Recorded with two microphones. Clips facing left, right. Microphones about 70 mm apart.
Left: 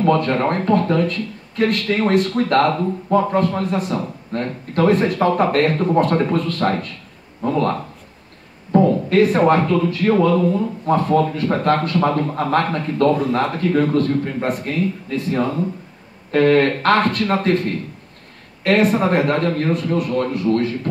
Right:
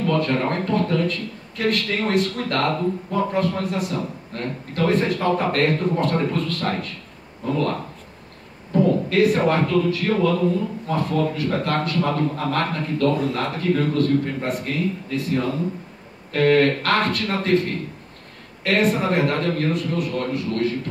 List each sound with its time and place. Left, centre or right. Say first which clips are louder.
0.0 s a man's voice: left 4 dB; left
8.7 s a man's voice: left 4 dB; left
18.6 s a man's voice: left 4 dB; left